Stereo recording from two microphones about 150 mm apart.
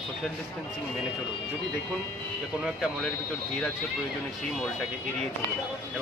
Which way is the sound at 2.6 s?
Centre (ahead or behind).